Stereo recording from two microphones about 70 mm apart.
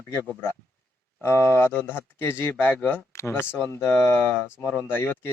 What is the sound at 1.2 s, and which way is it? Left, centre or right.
Speech, left.